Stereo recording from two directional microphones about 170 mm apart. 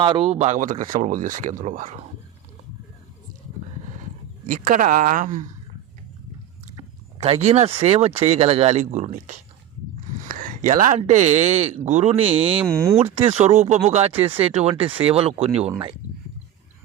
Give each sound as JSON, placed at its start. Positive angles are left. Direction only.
{"t": 0.0, "sound": "speech", "side_deg": -30}
{"t": 4.4, "sound": "speech", "side_deg": -55}
{"t": 7.2, "sound": "speech", "side_deg": -40}
{"t": 12.7, "sound": "speech", "side_deg": -15}
{"t": 13.1, "sound": "speech", "side_deg": -35}